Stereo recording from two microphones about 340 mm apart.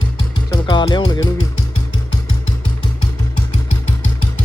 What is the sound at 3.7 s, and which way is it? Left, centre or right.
Vehicle, left.